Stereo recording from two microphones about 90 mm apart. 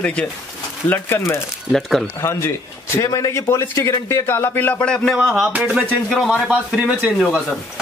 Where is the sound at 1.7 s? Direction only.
Centre (ahead or behind).